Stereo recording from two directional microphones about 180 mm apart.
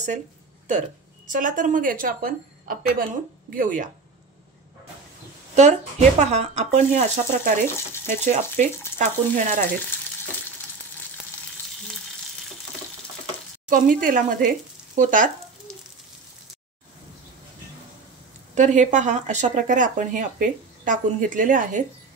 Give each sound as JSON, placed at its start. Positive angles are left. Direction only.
{"t": 0.7, "sound": "a woman's voice", "side_deg": -45}
{"t": 5.5, "sound": "speech", "side_deg": -40}
{"t": 13.7, "sound": "speech", "side_deg": -50}
{"t": 18.5, "sound": "speech", "side_deg": -40}